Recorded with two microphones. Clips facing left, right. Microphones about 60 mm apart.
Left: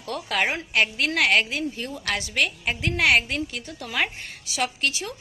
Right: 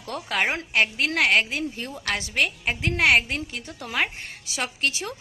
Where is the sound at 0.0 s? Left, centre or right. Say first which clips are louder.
Even; right.